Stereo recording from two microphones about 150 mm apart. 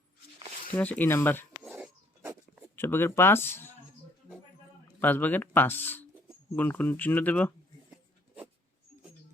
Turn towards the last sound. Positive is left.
turn(degrees=10)  # may be behind; listen again after turning